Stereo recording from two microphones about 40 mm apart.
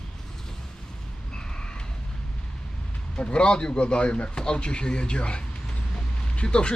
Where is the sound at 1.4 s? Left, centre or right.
Left.